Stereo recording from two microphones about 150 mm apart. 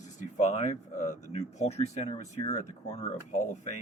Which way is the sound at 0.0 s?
55° left (ahead or behind).